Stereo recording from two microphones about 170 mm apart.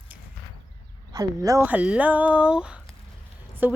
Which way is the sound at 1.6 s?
10° right (ahead or behind).